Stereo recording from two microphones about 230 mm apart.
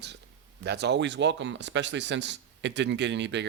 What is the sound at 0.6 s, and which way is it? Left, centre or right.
Speech, right.